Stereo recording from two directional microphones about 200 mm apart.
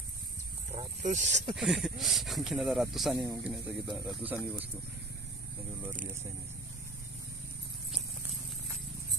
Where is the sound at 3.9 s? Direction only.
20° right (ahead or behind).